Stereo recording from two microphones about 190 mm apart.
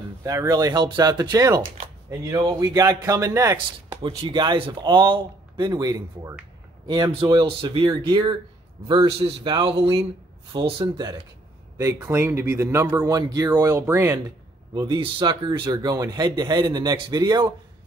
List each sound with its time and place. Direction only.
0.2 s a man's voice: 20° right (ahead or behind)
11.8 s a man's voice: 10° right (ahead or behind)